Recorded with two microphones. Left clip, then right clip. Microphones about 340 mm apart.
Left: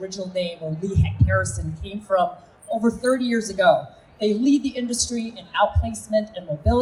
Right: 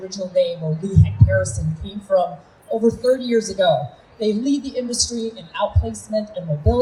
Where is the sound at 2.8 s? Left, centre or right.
Left.